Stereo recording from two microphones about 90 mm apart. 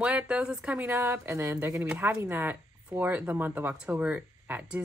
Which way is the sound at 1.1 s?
30° right (ahead or behind).